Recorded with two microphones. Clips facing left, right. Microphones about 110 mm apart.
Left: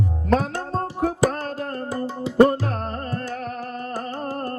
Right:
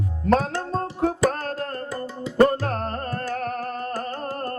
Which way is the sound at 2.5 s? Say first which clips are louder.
Even; 45° right (ahead or behind).